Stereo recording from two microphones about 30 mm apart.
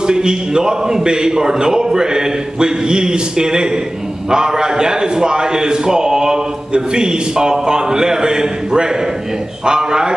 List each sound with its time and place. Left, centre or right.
0.0 s a man's voice: right